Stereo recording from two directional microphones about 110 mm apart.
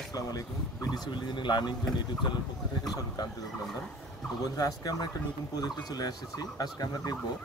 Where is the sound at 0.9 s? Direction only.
45° left (ahead or behind).